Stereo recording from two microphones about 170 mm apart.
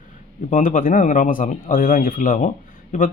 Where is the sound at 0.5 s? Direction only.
50° left (ahead or behind).